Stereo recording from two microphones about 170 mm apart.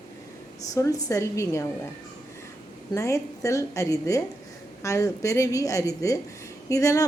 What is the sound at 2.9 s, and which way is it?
A woman's voice, 20° left (ahead or behind).